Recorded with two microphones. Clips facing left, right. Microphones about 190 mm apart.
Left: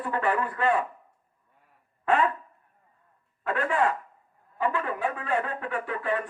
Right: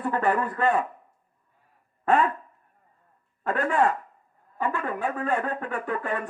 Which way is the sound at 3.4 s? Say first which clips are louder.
Right 2 dB; 40° right (ahead or behind).